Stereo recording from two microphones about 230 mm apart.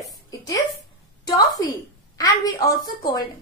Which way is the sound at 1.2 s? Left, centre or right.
Centre.